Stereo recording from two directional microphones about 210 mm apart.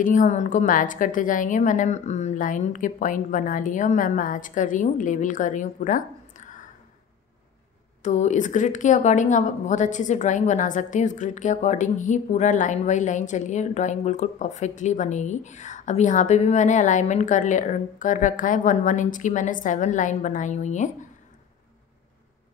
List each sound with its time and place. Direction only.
0.0 s speech: 40° left (ahead or behind)
8.0 s speech: 35° left (ahead or behind)